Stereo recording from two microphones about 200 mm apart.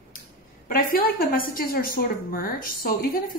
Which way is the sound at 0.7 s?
45° left (ahead or behind).